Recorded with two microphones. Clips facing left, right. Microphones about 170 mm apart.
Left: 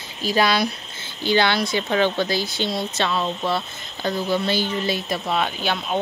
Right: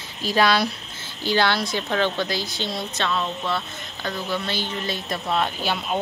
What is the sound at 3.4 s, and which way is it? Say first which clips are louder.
Speech: left 4 dB; 35° left (ahead or behind).